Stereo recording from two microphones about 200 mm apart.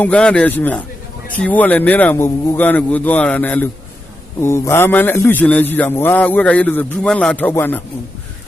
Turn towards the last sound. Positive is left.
turn(degrees=10)  # may be behind; listen again after turning